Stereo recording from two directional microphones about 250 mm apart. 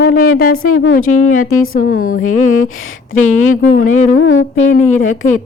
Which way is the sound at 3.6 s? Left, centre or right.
Left.